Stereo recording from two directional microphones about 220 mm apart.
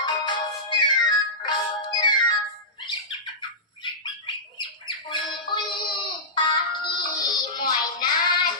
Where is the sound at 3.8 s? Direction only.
20° left (ahead or behind).